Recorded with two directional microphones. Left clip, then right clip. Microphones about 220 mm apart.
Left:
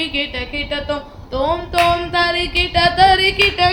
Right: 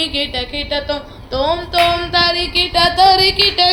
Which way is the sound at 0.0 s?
15° left (ahead or behind).